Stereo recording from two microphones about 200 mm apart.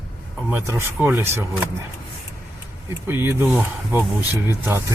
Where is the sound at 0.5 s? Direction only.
10° right (ahead or behind).